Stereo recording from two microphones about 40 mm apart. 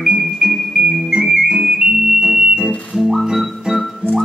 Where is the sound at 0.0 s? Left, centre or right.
Right.